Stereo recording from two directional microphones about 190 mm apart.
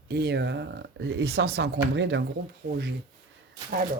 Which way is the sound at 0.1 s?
60° right (ahead or behind).